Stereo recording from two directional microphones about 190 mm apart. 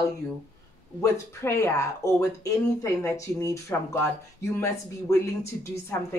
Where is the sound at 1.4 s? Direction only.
15° left (ahead or behind).